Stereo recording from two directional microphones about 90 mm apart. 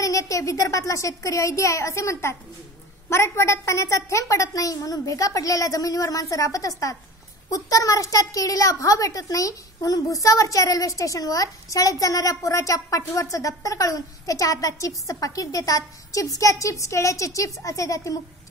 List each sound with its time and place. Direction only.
0.0 s a child's voice: 40° left (ahead or behind)